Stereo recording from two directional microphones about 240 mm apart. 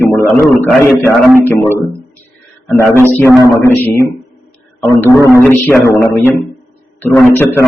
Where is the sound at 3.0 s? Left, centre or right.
Centre.